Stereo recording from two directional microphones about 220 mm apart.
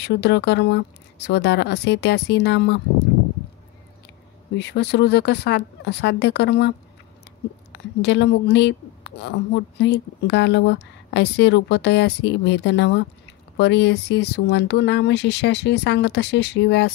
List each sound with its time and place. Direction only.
0.0 s a woman's voice: 50° left (ahead or behind)
4.6 s a woman's voice: 50° left (ahead or behind)
7.7 s a woman's voice: 50° left (ahead or behind)